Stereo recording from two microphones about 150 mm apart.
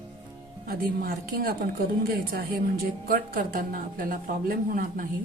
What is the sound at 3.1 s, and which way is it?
A woman's voice, 70° right (ahead or behind).